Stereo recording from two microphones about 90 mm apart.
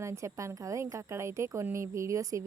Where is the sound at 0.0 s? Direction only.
35° right (ahead or behind).